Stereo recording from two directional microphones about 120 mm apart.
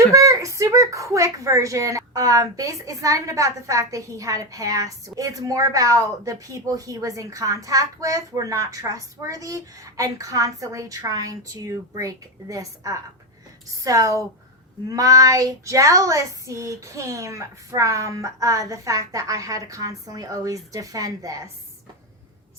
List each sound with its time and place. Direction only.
0.1 s speech: 30° right (ahead or behind)